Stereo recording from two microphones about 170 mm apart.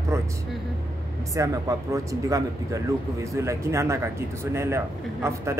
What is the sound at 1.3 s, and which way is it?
Speech, 20° right (ahead or behind).